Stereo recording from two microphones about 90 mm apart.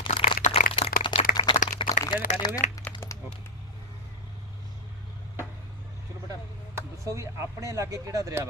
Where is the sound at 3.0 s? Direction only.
30° left (ahead or behind).